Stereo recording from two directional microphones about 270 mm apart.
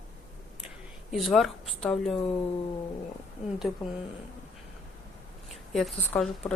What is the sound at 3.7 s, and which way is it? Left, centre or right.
Speech, centre.